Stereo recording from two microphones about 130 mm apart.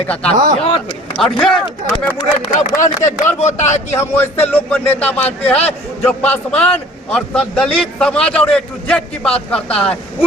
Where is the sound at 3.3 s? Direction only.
60° left (ahead or behind).